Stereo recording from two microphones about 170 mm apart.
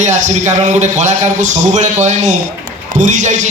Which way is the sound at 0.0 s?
45° right (ahead or behind).